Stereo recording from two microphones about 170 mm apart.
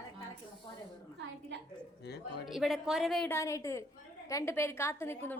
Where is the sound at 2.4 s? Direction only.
Centre (ahead or behind).